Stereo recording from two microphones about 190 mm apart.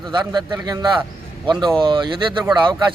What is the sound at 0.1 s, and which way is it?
A man's voice, 25° right (ahead or behind).